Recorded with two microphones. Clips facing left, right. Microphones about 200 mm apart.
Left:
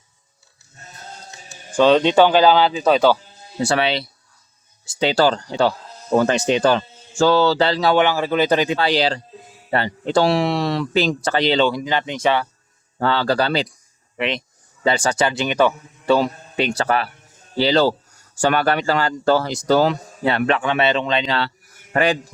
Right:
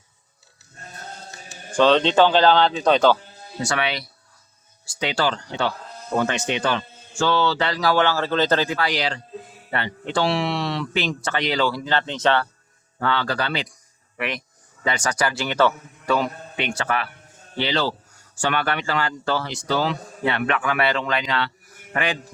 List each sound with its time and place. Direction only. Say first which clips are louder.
1.7 s speech: left 3 dB; 10° left (ahead or behind)
3.6 s a man's voice: left 6 dB; 30° left (ahead or behind); by 12.5 s 10° left (ahead or behind)
13.0 s a man's voice: left 5 dB; 35° left (ahead or behind)
14.2 s speech: left 5 dB; 25° left (ahead or behind)
16.0 s a man's voice: left 5 dB; 35° left (ahead or behind)